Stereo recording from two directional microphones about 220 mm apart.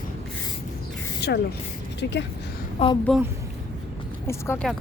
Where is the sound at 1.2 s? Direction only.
50° left (ahead or behind).